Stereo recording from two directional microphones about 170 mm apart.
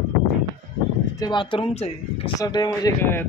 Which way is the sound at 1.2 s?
25° left (ahead or behind).